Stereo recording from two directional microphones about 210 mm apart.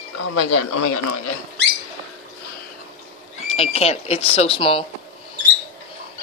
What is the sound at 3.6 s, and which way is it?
Speech, 30° left (ahead or behind).